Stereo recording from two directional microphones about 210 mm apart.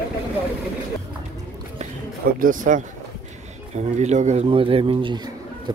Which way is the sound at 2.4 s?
40° right (ahead or behind).